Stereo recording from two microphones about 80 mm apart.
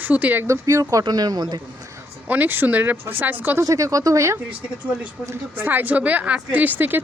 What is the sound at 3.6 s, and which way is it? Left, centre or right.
Speech, right.